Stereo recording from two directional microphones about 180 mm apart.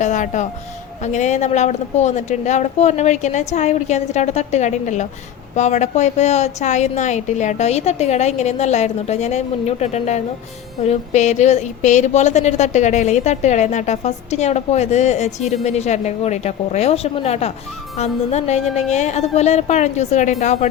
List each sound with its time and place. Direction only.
0.0 s a woman's voice: 45° left (ahead or behind)